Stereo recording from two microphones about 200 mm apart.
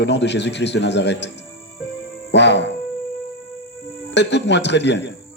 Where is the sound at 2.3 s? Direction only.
60° left (ahead or behind).